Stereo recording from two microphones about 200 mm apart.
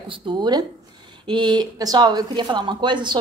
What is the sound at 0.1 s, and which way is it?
A woman's voice, 25° right (ahead or behind).